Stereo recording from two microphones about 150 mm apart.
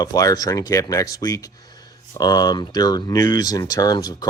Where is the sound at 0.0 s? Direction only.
25° left (ahead or behind).